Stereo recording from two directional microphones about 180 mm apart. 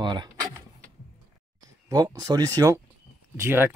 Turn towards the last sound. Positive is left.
turn(degrees=-10)  # may be behind; listen again after turning